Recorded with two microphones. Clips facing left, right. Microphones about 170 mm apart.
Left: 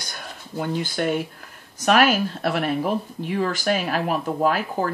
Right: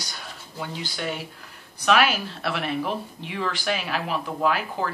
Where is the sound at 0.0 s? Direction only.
50° left (ahead or behind).